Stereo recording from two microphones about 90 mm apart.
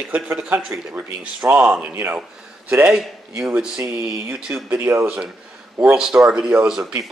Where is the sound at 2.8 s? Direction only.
5° right (ahead or behind).